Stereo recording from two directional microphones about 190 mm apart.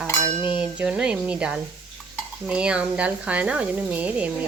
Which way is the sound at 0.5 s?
5° right (ahead or behind).